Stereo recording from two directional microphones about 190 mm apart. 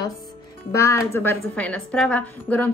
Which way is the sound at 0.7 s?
15° left (ahead or behind).